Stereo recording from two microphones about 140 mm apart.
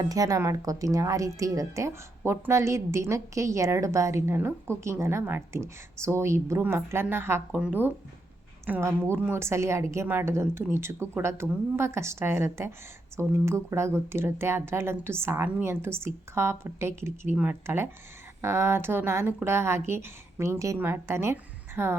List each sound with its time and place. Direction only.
0.0 s a woman's voice: 25° right (ahead or behind)